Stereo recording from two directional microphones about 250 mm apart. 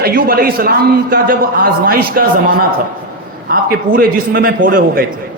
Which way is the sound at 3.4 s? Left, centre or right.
Right.